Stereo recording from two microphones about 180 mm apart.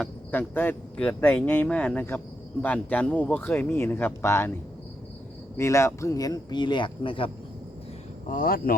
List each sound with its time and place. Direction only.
0.0 s speech: 10° left (ahead or behind)
5.5 s speech: 15° left (ahead or behind)
8.3 s speech: 55° left (ahead or behind)